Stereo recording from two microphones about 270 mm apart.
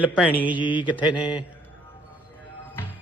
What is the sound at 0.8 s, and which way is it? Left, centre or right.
Speech, centre.